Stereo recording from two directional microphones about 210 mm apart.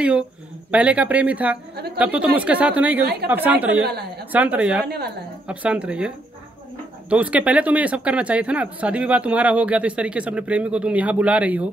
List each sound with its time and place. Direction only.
0.7 s a woman's voice: 5° right (ahead or behind)
3.8 s a woman's voice: 50° right (ahead or behind)
4.3 s a woman's voice: 5° right (ahead or behind)
4.8 s a woman's voice: 50° right (ahead or behind)
5.5 s speech: 5° right (ahead or behind)